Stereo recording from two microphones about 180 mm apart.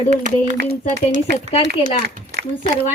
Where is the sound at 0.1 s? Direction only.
45° right (ahead or behind).